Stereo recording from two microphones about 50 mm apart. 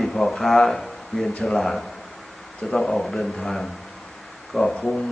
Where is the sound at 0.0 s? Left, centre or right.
Centre.